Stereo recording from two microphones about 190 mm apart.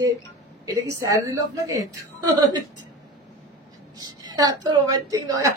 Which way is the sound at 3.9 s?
20° right (ahead or behind).